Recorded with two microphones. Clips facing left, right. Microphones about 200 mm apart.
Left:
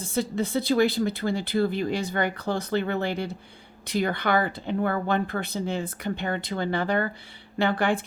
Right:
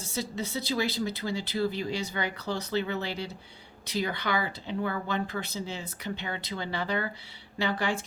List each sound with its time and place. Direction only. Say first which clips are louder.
0.0 s speech: left 7 dB; 55° left (ahead or behind)